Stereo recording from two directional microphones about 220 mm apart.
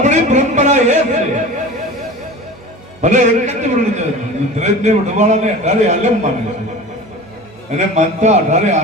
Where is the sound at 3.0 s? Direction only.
35° right (ahead or behind).